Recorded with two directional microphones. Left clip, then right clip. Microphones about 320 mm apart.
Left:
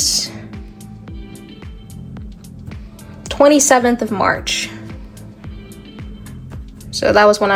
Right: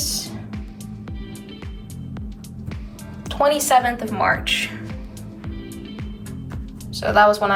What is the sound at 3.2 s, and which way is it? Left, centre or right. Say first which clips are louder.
A woman's voice: left 7 dB; left.